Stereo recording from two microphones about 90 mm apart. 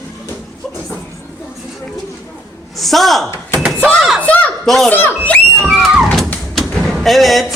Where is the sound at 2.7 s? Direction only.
Centre (ahead or behind).